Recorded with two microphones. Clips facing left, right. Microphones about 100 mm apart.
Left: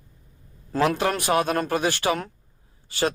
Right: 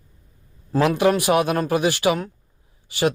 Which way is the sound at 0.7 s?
15° right (ahead or behind).